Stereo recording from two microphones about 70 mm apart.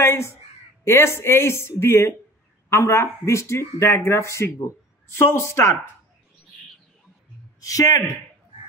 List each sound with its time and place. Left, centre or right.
0.0 s crow: left
0.8 s speech: left
7.6 s a man's voice: left